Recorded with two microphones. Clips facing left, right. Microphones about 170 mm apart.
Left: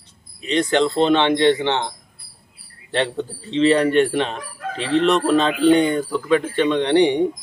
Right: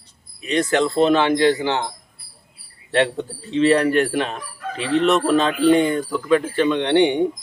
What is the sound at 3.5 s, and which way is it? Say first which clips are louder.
Speech: even; 30° left (ahead or behind).